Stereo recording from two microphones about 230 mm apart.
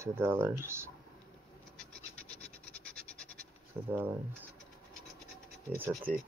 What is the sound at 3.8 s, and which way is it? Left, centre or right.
Speech, centre.